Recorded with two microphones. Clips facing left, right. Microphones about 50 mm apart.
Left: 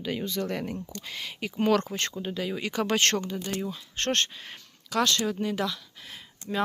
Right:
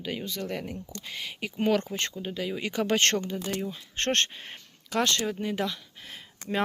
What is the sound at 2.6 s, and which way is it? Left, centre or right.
Speech, centre.